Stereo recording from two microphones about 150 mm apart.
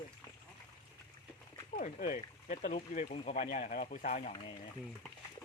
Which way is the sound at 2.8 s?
75° left (ahead or behind).